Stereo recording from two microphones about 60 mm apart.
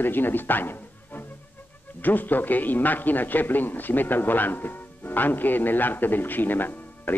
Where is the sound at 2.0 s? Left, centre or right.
Left.